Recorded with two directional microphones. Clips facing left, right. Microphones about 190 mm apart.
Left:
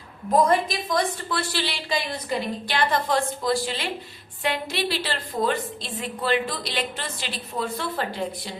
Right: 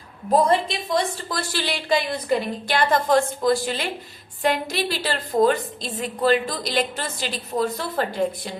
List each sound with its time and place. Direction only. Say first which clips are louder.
0.3 s a woman's voice: right 1 dB; 30° right (ahead or behind)
1.3 s a woman's voice: right 1 dB; 45° right (ahead or behind)